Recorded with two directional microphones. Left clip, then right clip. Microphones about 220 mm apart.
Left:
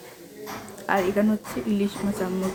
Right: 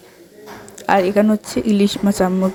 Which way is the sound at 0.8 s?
40° right (ahead or behind).